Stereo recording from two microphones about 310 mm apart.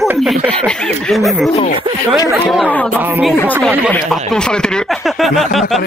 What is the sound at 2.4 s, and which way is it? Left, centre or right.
Speech, centre.